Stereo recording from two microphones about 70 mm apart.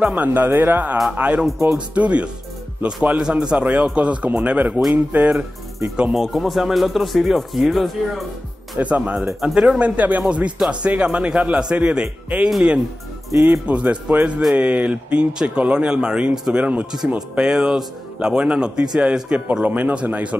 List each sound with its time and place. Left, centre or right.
0.0 s a man's voice: right
3.2 s a man's voice: centre
6.1 s speech: centre
8.7 s speech: right
9.4 s a man's voice: centre
9.8 s a man's voice: right
12.4 s speech: centre
13.4 s a man's voice: right